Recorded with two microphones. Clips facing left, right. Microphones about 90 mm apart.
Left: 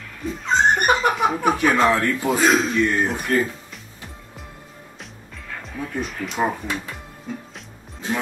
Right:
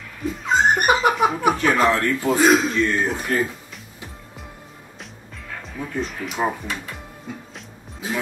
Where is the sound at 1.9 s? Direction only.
10° left (ahead or behind).